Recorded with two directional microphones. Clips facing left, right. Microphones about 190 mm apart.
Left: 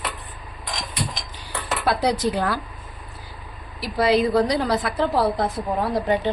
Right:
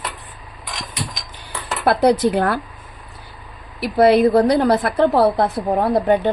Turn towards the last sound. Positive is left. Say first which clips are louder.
# right 6 dB
turn(degrees=-55)  # may be behind; listen again after turning